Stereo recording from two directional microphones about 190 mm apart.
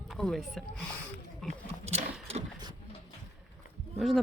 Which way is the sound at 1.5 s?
35° right (ahead or behind).